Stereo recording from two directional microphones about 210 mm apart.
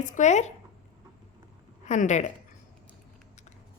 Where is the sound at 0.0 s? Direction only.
35° left (ahead or behind).